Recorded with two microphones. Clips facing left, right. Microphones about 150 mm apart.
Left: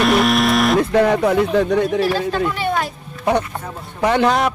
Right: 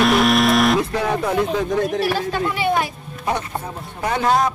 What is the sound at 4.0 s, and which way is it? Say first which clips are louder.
Speech: left 3 dB; 90° left.